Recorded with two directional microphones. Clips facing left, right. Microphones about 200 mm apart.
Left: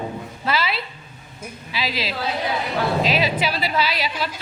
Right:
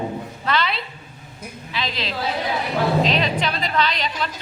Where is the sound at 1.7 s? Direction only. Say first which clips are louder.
Left 1 dB; 5° left (ahead or behind).